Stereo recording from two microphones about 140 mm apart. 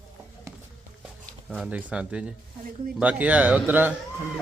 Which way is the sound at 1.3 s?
Centre (ahead or behind).